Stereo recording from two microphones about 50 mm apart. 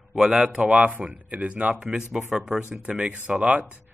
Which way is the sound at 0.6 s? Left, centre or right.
Right.